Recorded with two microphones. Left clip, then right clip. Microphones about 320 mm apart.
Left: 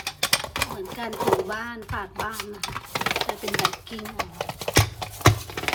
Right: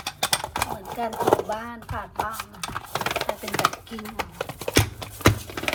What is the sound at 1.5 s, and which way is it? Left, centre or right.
Speech, centre.